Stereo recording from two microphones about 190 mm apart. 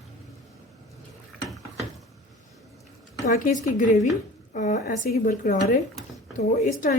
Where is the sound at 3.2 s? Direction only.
40° left (ahead or behind).